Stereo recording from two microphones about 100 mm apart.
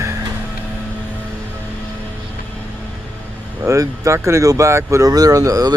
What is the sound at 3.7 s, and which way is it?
Speech, 30° right (ahead or behind).